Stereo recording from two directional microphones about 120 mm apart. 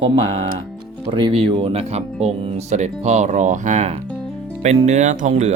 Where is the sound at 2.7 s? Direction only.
70° right (ahead or behind).